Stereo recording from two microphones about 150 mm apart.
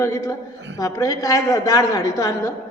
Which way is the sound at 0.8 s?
20° left (ahead or behind).